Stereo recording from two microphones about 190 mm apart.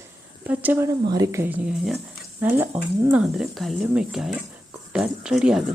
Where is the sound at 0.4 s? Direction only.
10° right (ahead or behind).